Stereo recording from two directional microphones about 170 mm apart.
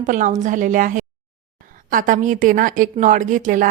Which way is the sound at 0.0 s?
45° right (ahead or behind).